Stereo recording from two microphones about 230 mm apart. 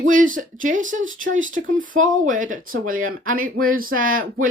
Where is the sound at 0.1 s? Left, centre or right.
Right.